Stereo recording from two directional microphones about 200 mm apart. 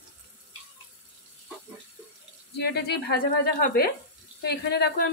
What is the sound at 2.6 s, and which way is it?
A woman's voice, 55° left (ahead or behind).